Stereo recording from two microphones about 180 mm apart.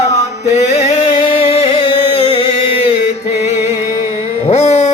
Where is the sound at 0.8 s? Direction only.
35° left (ahead or behind).